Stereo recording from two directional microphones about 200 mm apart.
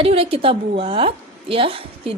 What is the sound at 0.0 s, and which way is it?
Speech, 30° right (ahead or behind).